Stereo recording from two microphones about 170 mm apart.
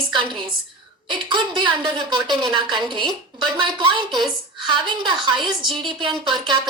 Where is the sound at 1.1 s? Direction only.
25° right (ahead or behind).